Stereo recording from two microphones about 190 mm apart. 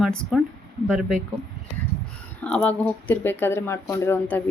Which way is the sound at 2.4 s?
5° left (ahead or behind).